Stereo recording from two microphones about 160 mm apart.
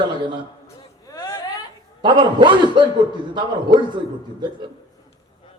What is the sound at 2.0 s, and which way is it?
Speech, 30° right (ahead or behind).